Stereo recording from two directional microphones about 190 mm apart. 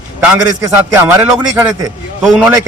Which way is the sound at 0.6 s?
15° right (ahead or behind).